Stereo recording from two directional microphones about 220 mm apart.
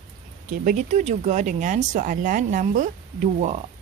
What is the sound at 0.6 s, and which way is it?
Speech, 35° right (ahead or behind).